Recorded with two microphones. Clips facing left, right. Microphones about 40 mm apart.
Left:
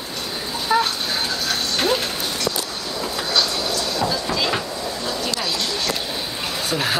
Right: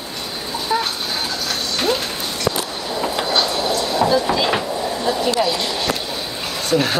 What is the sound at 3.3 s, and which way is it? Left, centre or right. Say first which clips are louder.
Train: right 1 dB; right.